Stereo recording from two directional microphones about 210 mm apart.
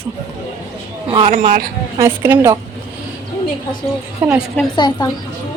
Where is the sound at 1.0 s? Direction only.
30° right (ahead or behind).